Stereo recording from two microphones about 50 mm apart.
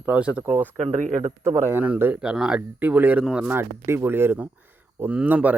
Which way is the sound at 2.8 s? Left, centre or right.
Right.